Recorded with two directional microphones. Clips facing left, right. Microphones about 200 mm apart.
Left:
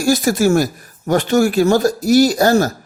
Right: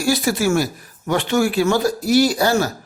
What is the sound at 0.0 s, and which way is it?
Speech, 45° left (ahead or behind).